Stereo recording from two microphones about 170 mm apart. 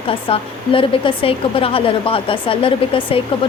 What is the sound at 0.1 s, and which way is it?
Speech, 30° left (ahead or behind).